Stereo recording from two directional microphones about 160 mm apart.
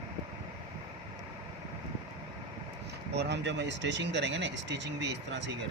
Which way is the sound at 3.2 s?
90° right.